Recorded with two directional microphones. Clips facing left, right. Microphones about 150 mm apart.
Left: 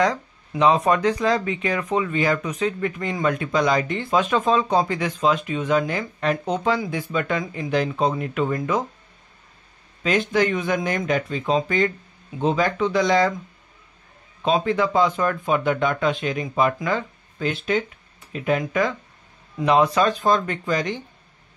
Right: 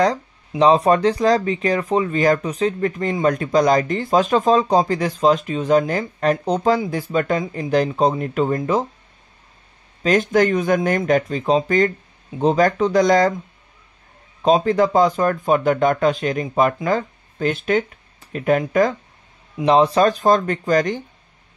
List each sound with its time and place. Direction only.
0.6 s speech: 35° right (ahead or behind)
10.0 s speech: 45° right (ahead or behind)
14.4 s speech: 40° right (ahead or behind)
19.6 s speech: 30° right (ahead or behind)